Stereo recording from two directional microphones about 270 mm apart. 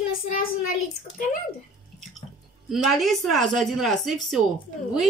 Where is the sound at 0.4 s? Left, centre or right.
Left.